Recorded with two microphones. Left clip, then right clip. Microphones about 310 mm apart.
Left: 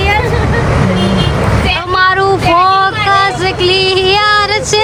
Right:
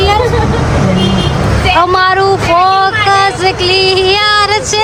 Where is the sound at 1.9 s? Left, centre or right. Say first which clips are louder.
Right 1 dB; centre.